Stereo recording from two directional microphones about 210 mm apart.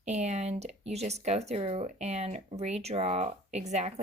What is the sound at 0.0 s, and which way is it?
Speech, 30° right (ahead or behind).